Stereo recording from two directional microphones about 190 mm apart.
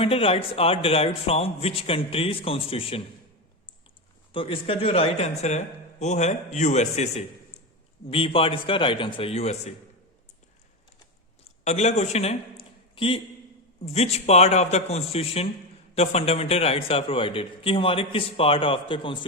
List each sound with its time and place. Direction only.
0.0 s a man's voice: 30° left (ahead or behind)
4.3 s a man's voice: 25° left (ahead or behind)
11.6 s a man's voice: 35° left (ahead or behind)